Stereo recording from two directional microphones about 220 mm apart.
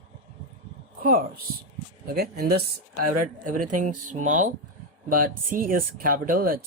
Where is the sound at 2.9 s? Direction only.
90° right.